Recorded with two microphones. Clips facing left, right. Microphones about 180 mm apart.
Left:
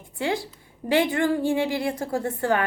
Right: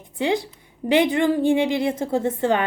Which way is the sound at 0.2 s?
20° right (ahead or behind).